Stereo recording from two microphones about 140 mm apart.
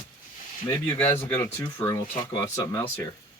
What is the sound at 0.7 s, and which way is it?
Speech, 15° left (ahead or behind).